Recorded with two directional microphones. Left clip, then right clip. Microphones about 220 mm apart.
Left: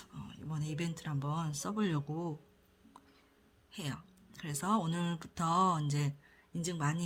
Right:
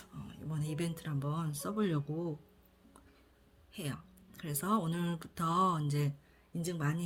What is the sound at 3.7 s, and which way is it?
Speech, 25° left (ahead or behind).